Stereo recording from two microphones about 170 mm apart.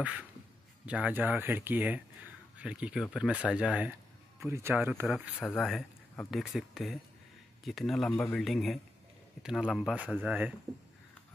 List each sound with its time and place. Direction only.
0.8 s speech: 10° right (ahead or behind)
8.1 s a man's voice: 15° left (ahead or behind)
8.4 s speech: centre (ahead or behind)